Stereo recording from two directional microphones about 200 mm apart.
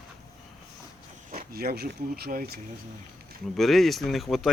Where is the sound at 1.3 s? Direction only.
50° right (ahead or behind).